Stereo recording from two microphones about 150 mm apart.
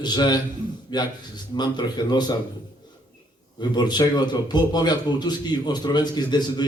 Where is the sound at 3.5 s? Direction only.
30° left (ahead or behind).